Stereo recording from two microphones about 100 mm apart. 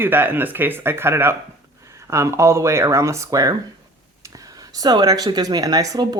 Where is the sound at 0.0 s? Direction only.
20° right (ahead or behind).